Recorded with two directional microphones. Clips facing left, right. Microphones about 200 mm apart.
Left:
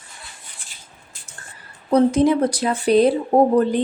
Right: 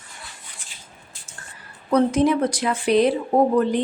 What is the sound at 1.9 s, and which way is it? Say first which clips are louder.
Speech: left 3 dB; 30° left (ahead or behind).